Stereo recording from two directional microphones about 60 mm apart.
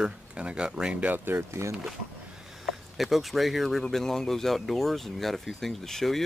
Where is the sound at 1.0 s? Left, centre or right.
Right.